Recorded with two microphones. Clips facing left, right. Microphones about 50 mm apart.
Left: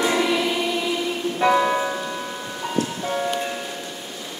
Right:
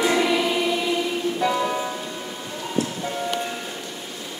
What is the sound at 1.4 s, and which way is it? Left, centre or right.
Music, left.